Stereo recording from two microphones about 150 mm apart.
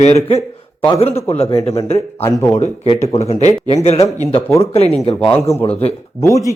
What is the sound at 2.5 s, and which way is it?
Speech, 45° left (ahead or behind).